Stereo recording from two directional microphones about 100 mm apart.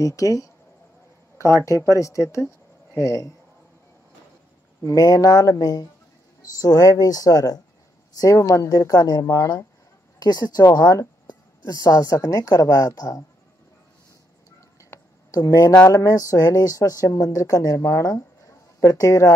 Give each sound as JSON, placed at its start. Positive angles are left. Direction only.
{"t": 0.0, "sound": "a woman's voice", "side_deg": 35}
{"t": 2.0, "sound": "a woman's voice", "side_deg": 30}
{"t": 4.8, "sound": "a woman's voice", "side_deg": 40}
{"t": 14.8, "sound": "a sound", "side_deg": 30}
{"t": 15.9, "sound": "a woman's voice", "side_deg": 30}